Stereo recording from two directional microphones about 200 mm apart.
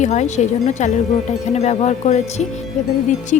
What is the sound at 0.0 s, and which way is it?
Speech, 35° left (ahead or behind).